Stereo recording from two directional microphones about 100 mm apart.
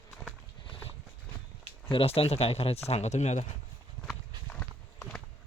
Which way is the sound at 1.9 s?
70° left (ahead or behind).